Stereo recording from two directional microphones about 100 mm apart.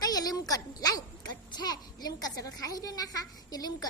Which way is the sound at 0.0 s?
40° left (ahead or behind).